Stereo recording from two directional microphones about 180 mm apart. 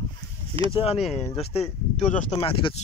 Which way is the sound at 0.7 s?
35° left (ahead or behind).